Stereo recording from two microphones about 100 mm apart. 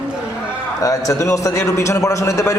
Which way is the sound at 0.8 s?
35° left (ahead or behind).